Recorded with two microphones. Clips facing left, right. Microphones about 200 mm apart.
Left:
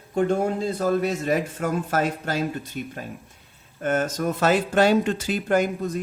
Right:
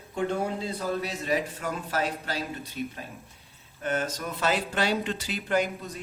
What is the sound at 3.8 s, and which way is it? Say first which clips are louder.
Speech: left 7 dB; 45° left (ahead or behind).